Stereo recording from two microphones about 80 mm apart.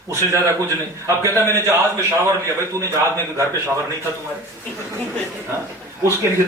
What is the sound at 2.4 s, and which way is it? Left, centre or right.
Speech, left.